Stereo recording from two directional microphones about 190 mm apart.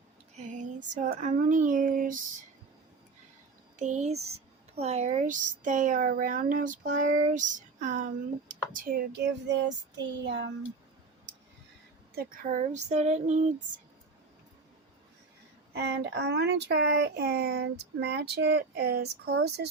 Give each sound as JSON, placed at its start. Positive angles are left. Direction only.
{"t": 0.3, "sound": "a sound", "side_deg": -40}
{"t": 0.9, "sound": "speech", "side_deg": -40}
{"t": 3.8, "sound": "child singing", "side_deg": -40}
{"t": 4.8, "sound": "speech", "side_deg": -35}
{"t": 12.1, "sound": "child singing", "side_deg": -50}
{"t": 15.7, "sound": "speech", "side_deg": -60}